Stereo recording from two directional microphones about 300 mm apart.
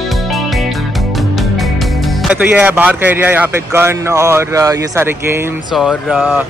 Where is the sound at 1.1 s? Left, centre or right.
Centre.